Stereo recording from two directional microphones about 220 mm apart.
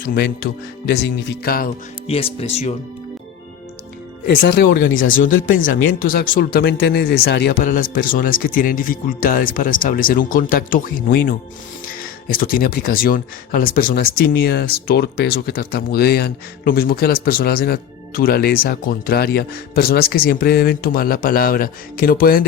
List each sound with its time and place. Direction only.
0.0 s speech: 40° left (ahead or behind)
2.0 s speech: 25° left (ahead or behind)
4.3 s speech: 45° left (ahead or behind)